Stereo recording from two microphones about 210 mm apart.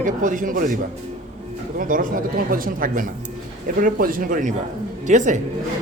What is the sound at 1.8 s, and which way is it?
Speech, 40° right (ahead or behind).